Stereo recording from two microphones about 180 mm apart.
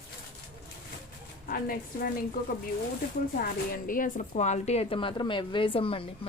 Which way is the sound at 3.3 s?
50° left (ahead or behind).